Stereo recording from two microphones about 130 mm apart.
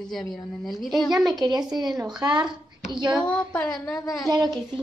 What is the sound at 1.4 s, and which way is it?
Speech, 30° right (ahead or behind).